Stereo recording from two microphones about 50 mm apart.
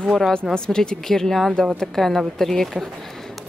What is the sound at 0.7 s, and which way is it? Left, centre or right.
A woman's voice, centre.